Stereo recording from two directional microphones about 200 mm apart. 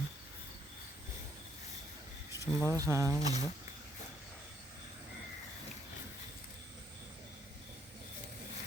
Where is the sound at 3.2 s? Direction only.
35° left (ahead or behind).